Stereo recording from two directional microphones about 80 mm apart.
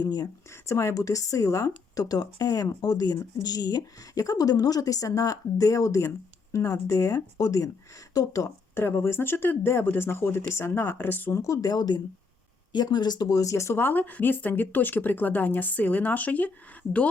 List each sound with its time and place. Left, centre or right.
0.0 s speech: left
0.5 s speech: left
8.7 s speech: left
10.9 s speech: left
11.3 s speech: left; by 16.5 s centre